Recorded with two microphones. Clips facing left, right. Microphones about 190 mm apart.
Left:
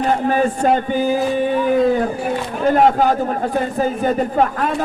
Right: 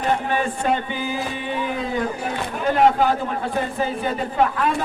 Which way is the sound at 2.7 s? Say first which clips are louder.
Left 2 dB; 45° left (ahead or behind).